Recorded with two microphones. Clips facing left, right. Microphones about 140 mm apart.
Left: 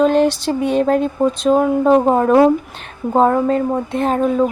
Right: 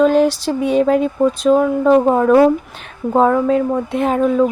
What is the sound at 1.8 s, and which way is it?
Speech, 25° left (ahead or behind).